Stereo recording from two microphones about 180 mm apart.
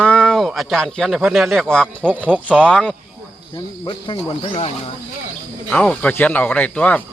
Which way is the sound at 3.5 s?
25° left (ahead or behind).